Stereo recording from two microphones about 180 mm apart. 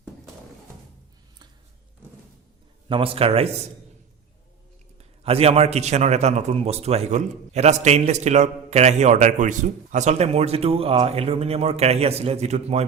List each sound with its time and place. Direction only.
2.9 s a man's voice: 30° right (ahead or behind)
4.9 s a man's voice: 35° right (ahead or behind)